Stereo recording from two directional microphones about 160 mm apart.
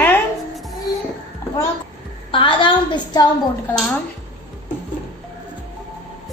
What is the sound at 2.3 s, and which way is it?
Speech, 30° left (ahead or behind).